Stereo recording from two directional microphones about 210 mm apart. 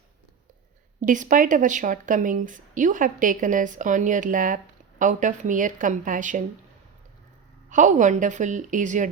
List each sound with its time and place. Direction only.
1.0 s speech: 40° right (ahead or behind)
7.7 s speech: 35° right (ahead or behind)